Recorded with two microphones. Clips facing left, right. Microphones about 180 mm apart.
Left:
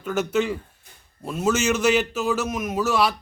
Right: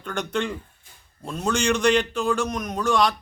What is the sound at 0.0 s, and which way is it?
A man's voice, 5° left (ahead or behind).